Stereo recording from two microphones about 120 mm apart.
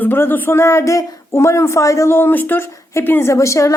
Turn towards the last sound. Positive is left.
turn(degrees=25)  # may be behind; listen again after turning